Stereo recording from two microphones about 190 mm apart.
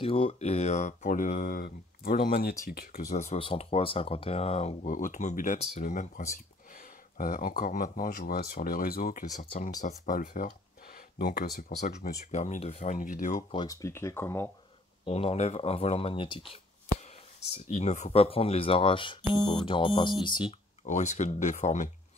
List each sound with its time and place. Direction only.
0.0 s speech: 30° left (ahead or behind); by 11.4 s 55° left (ahead or behind)
11.7 s speech: 40° left (ahead or behind); by 14.5 s 10° left (ahead or behind)
15.0 s speech: 30° left (ahead or behind)
17.6 s speech: 35° left (ahead or behind)
20.8 s speech: 40° left (ahead or behind)